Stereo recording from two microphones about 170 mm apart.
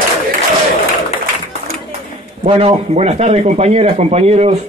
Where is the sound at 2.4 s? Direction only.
35° right (ahead or behind).